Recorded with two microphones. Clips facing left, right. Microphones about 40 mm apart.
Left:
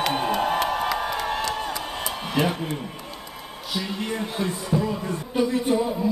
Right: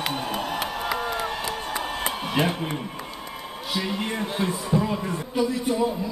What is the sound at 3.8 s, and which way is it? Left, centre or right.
Speech, right.